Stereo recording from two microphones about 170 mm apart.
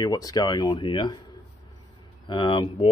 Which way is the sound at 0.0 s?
20° left (ahead or behind).